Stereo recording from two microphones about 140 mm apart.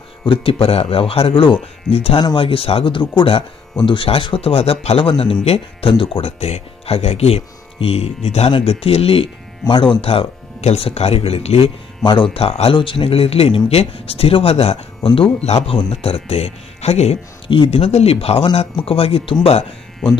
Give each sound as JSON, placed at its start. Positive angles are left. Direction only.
{"t": 0.3, "sound": "speech", "side_deg": 40}